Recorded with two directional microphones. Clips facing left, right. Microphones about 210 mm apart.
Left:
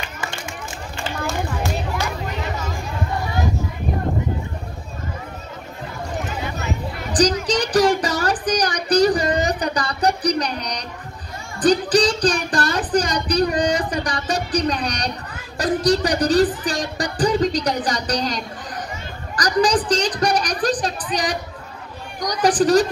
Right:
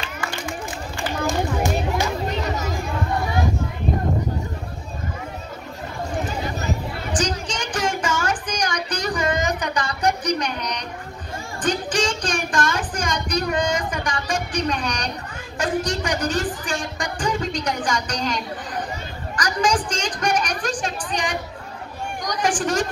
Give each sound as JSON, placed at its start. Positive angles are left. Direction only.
{"t": 1.2, "sound": "children playing", "side_deg": -15}
{"t": 7.1, "sound": "music", "side_deg": 35}
{"t": 7.4, "sound": "child singing", "side_deg": 35}
{"t": 11.6, "sound": "music", "side_deg": 35}
{"t": 19.3, "sound": "a sound", "side_deg": 35}
{"t": 22.2, "sound": "a child's voice", "side_deg": 35}